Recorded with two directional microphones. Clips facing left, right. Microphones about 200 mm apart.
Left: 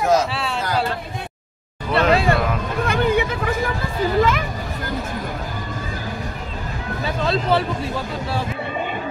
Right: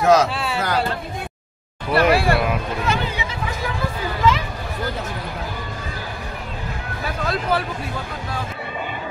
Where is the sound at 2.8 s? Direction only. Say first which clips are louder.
Left 5 dB; 55° left (ahead or behind).